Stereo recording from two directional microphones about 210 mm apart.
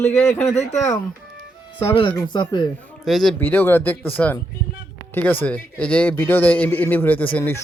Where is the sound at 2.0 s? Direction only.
20° left (ahead or behind).